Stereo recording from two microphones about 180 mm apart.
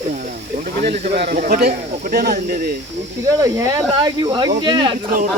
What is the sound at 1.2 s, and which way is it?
Speech, 60° right (ahead or behind).